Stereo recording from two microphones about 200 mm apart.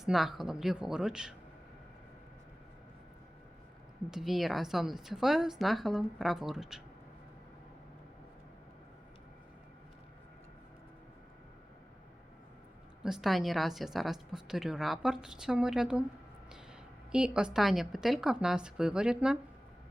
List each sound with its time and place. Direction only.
0.0 s a woman's voice: centre (ahead or behind)
4.1 s a woman's voice: centre (ahead or behind)
13.0 s a woman's voice: centre (ahead or behind)
17.1 s a woman's voice: 5° right (ahead or behind)